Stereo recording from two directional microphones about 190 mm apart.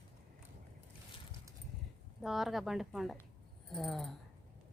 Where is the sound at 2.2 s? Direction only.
Centre (ahead or behind).